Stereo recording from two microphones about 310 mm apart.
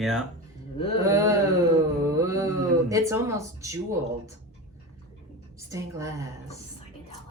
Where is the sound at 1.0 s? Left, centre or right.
Centre.